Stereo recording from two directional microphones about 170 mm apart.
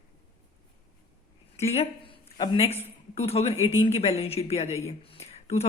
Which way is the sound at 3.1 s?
35° left (ahead or behind).